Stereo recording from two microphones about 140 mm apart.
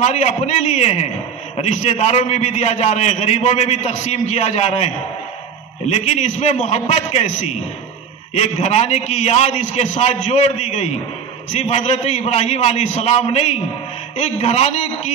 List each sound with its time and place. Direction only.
0.0 s a man's voice: 50° left (ahead or behind)